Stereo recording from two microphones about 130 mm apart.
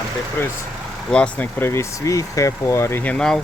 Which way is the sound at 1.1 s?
10° left (ahead or behind).